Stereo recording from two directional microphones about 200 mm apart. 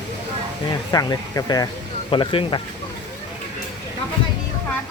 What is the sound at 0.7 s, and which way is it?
Speech, 20° left (ahead or behind).